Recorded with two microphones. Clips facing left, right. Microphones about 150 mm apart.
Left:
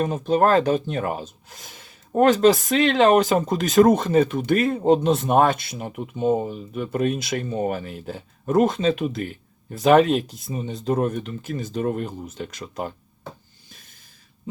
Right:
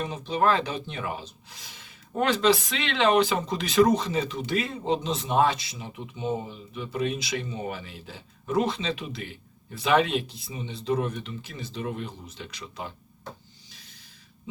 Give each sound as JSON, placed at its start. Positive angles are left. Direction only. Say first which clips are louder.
{"t": 0.0, "sound": "speech", "louder": "left 6 dB", "side_deg": 45}
{"t": 13.7, "sound": "snort", "louder": "left 5 dB", "side_deg": 50}